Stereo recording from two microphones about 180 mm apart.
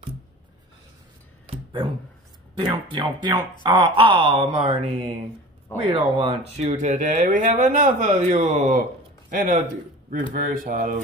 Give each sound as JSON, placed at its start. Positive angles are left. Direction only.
{"t": 1.5, "sound": "a sound", "side_deg": -30}
{"t": 2.5, "sound": "speech", "side_deg": -25}
{"t": 5.8, "sound": "speech", "side_deg": -30}
{"t": 6.7, "sound": "speech", "side_deg": -40}